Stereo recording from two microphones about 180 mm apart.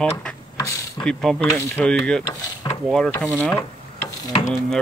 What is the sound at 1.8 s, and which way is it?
Speech, 5° left (ahead or behind).